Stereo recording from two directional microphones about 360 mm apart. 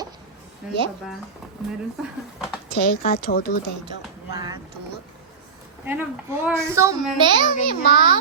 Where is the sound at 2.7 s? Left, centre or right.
Left.